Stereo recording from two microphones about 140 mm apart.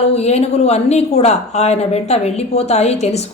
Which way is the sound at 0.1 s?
50° left (ahead or behind).